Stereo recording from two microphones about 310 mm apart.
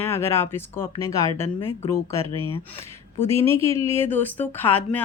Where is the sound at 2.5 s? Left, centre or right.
Centre.